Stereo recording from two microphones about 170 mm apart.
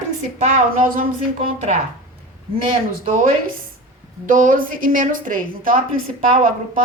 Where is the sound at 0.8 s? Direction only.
55° right (ahead or behind).